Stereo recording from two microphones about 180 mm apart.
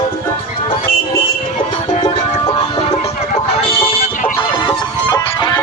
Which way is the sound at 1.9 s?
30° left (ahead or behind).